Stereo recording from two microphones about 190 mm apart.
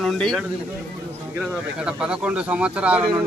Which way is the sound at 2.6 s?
5° right (ahead or behind).